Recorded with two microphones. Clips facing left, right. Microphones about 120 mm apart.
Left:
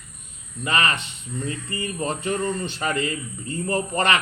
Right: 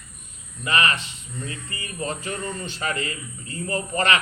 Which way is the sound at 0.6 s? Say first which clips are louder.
Even; 35° left (ahead or behind).